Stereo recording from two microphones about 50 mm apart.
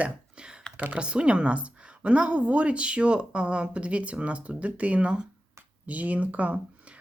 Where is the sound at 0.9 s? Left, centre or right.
Right.